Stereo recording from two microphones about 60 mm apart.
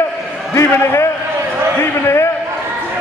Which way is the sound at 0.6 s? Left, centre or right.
Left.